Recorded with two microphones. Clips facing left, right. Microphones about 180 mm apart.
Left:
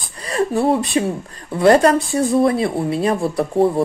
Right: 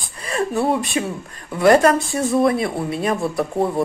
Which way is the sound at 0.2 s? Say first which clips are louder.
Left 3 dB; 30° left (ahead or behind).